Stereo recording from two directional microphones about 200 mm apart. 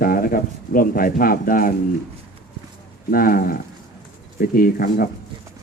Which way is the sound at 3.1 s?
45° left (ahead or behind).